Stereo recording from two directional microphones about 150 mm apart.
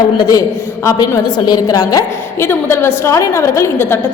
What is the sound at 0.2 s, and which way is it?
A woman's voice, 25° left (ahead or behind).